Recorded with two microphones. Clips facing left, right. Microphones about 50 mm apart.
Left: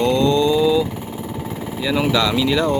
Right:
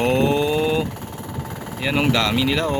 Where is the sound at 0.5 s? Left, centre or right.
Right.